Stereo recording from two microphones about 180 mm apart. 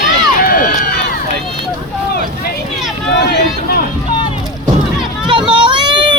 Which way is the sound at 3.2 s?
65° left (ahead or behind).